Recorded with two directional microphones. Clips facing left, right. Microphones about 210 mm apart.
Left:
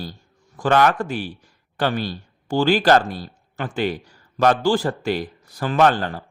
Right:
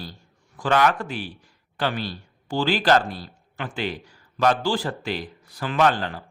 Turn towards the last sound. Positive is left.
turn(degrees=45)  # may be behind; listen again after turning